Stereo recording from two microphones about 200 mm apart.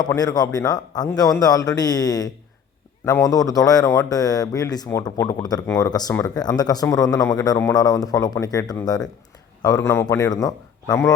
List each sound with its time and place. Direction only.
0.0 s a man's voice: 20° left (ahead or behind)